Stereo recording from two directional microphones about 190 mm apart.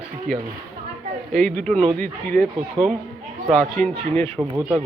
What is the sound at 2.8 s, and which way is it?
Speech, 25° right (ahead or behind).